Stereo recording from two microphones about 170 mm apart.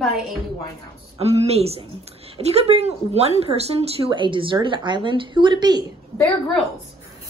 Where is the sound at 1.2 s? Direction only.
40° right (ahead or behind).